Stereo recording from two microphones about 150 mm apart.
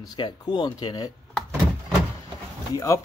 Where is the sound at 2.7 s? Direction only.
20° left (ahead or behind).